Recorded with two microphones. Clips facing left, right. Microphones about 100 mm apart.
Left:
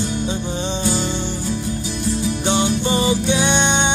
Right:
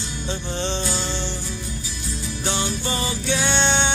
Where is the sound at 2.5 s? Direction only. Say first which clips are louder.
Left 6 dB; 20° left (ahead or behind).